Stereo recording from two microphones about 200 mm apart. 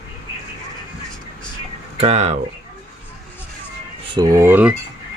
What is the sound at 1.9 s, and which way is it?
Speech, 30° right (ahead or behind).